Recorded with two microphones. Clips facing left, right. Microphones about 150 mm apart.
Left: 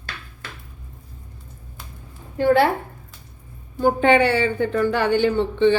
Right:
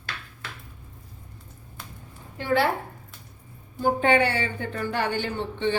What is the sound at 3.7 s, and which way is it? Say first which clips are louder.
Speech: left 5 dB; 85° left.